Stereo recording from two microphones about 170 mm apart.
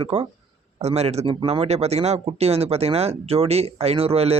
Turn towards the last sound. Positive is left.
turn(degrees=-35)  # may be behind; listen again after turning